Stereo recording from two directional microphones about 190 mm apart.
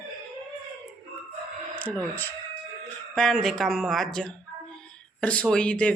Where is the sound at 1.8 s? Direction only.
10° left (ahead or behind).